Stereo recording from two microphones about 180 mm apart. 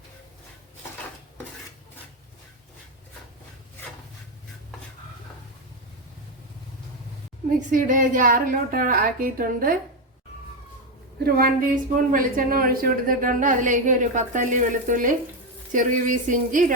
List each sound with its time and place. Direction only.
7.7 s a woman's voice: 45° right (ahead or behind)
11.3 s a woman's voice: 55° right (ahead or behind)